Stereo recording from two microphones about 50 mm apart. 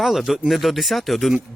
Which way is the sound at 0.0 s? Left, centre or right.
Centre.